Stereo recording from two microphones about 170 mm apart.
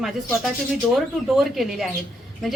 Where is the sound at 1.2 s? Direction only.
Centre (ahead or behind).